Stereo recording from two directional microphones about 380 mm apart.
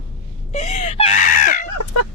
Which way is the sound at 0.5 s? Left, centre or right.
Centre.